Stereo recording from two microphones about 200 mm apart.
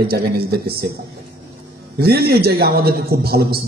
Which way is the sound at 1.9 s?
50° right (ahead or behind).